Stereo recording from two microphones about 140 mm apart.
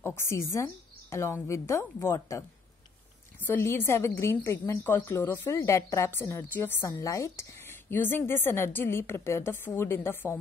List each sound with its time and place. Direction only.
0.0 s a woman's voice: 20° left (ahead or behind)